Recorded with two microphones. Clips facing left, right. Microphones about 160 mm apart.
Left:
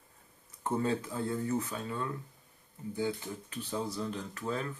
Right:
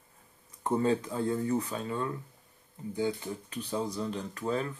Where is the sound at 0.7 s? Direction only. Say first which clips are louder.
Right 4 dB; 15° right (ahead or behind).